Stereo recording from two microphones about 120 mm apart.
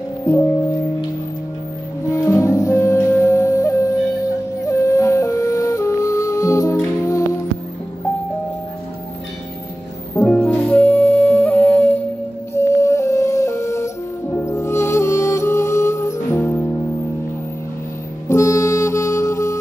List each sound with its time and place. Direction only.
2.0 s music: 25° left (ahead or behind)
10.1 s music: 10° left (ahead or behind)
12.5 s music: 25° left (ahead or behind)
18.3 s music: 25° left (ahead or behind)